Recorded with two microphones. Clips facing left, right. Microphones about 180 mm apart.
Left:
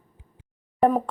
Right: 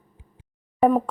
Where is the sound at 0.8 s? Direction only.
Centre (ahead or behind).